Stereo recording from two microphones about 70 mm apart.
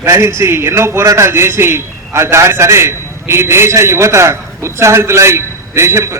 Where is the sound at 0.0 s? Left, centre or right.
Right.